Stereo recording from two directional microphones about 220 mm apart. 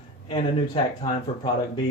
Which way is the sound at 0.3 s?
25° left (ahead or behind).